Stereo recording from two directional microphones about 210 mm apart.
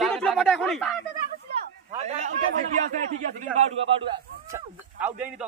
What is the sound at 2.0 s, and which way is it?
Speech, 35° right (ahead or behind).